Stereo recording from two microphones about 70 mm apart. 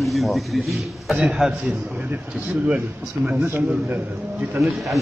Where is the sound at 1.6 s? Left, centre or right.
Right.